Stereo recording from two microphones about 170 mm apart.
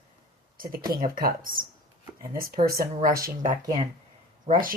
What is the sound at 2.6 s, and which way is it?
Speech, 60° right (ahead or behind).